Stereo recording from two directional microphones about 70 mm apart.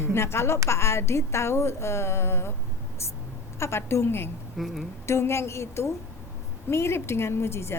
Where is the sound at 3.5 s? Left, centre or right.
Left.